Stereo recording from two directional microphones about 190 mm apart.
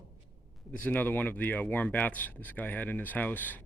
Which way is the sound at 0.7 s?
10° left (ahead or behind).